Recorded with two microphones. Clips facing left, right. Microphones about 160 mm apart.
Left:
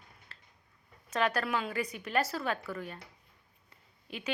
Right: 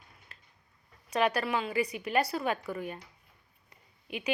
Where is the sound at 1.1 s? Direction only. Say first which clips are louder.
Right 2 dB; 10° right (ahead or behind).